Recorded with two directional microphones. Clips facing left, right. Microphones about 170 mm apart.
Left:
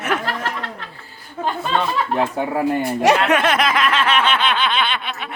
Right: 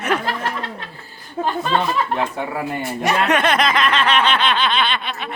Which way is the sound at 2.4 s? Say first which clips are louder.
Left 5 dB; 40° left (ahead or behind).